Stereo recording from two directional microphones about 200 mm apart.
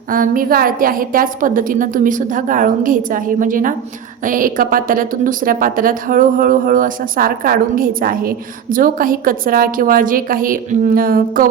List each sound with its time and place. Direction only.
0.1 s a woman's voice: 45° right (ahead or behind)